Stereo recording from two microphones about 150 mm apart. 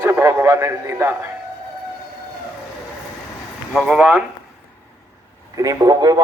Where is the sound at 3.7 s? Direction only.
5° right (ahead or behind).